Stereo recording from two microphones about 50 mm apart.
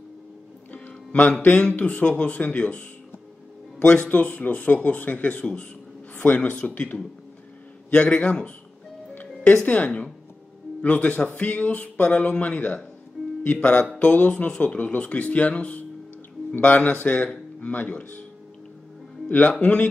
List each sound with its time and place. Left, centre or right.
0.8 s music: left
1.6 s speech: left
3.8 s speech: left
6.1 s a sound: left
6.5 s speech: left
9.7 s speech: left
19.2 s speech: left